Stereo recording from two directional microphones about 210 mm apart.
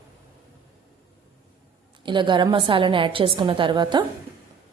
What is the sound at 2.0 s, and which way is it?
A woman's voice, 25° right (ahead or behind).